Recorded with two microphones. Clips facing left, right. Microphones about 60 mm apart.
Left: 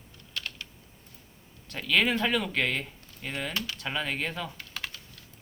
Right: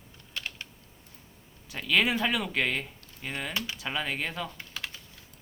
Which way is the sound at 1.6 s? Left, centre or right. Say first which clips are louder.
Even; centre.